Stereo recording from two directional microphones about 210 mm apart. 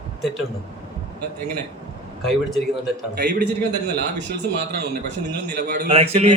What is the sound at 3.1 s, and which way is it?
Speech, 50° right (ahead or behind).